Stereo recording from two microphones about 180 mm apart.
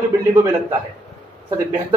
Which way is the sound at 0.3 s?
15° right (ahead or behind).